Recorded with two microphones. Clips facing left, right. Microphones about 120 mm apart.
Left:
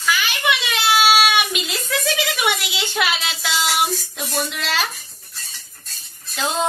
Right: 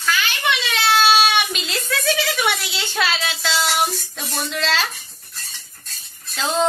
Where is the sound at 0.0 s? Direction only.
10° left (ahead or behind).